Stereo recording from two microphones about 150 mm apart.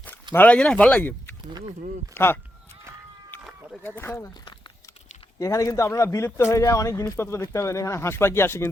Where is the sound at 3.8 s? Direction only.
15° left (ahead or behind).